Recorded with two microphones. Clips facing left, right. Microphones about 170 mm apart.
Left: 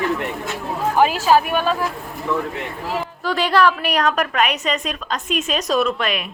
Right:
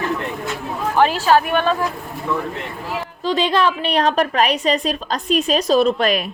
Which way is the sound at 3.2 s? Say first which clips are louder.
Even; 20° right (ahead or behind).